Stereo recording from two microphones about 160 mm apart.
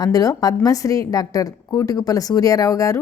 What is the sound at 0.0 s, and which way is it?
A woman's voice, 25° left (ahead or behind).